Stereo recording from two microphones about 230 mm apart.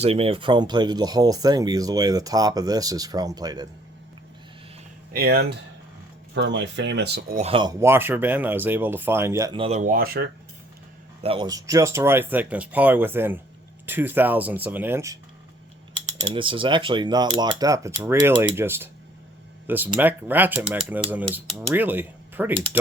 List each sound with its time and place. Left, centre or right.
0.0 s speech: right
5.1 s speech: right
7.4 s speech: right
11.2 s speech: right
16.2 s speech: right